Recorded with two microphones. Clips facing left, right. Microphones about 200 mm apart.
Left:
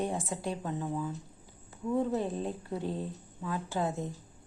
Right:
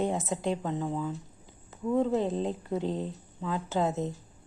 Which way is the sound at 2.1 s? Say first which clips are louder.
Right 4 dB; 25° right (ahead or behind).